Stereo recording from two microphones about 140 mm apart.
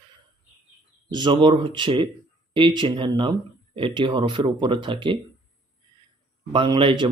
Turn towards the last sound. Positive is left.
turn(degrees=-35)  # may be behind; listen again after turning